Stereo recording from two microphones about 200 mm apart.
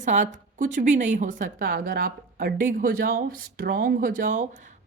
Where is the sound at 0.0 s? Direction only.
40° right (ahead or behind).